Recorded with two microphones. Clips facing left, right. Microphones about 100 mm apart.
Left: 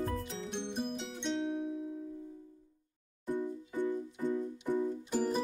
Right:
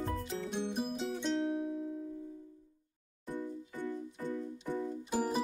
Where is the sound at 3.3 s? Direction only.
15° left (ahead or behind).